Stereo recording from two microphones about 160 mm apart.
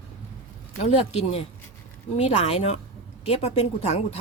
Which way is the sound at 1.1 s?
40° left (ahead or behind).